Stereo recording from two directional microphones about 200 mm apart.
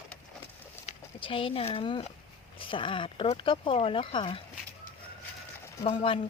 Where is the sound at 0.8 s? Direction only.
25° left (ahead or behind).